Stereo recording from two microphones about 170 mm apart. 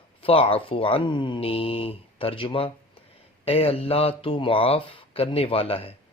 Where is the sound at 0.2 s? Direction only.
35° left (ahead or behind).